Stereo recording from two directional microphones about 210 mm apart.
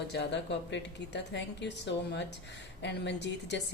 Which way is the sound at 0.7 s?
55° left (ahead or behind).